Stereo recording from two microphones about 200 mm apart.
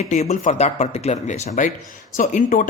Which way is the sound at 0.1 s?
35° left (ahead or behind).